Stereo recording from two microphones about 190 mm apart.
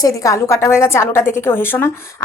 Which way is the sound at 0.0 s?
15° left (ahead or behind).